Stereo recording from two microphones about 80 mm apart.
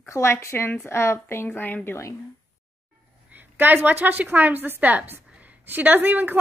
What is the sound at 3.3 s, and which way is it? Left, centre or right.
A woman's voice, right.